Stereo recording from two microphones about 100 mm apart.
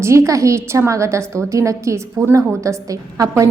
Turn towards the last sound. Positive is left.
turn(degrees=-35)  # may be behind; listen again after turning